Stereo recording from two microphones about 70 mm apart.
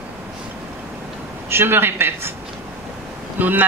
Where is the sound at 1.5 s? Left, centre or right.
Right.